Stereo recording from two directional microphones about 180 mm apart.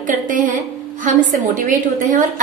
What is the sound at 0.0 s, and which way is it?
A woman's voice, 45° right (ahead or behind).